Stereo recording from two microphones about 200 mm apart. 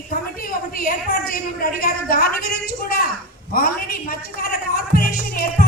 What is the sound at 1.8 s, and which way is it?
A woman's voice, 45° left (ahead or behind).